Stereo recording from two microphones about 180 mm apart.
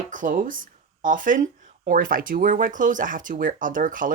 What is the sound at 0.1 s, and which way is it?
Speech, 45° right (ahead or behind).